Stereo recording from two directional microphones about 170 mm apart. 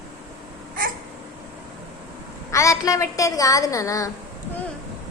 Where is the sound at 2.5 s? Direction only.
15° left (ahead or behind).